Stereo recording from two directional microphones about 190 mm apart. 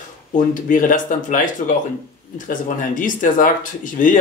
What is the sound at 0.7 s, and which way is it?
Speech, 45° left (ahead or behind).